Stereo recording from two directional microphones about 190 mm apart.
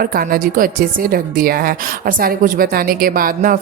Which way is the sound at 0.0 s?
50° right (ahead or behind).